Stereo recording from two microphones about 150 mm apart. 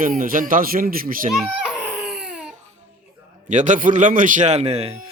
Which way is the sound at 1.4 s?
5° right (ahead or behind).